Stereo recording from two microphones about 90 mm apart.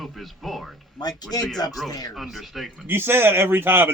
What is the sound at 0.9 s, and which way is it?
A man's voice, 45° left (ahead or behind).